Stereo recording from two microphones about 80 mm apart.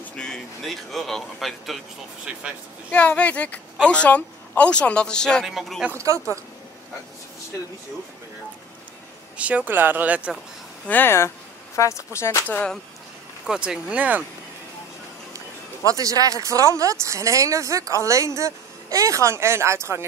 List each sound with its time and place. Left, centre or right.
0.0 s speech: centre
2.9 s speech: centre
5.5 s speech: centre
9.4 s speech: centre
10.9 s speech: left
13.5 s speech: centre
15.9 s speech: right